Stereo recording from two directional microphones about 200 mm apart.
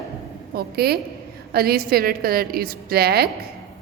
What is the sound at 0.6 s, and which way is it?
A woman's voice, 50° right (ahead or behind).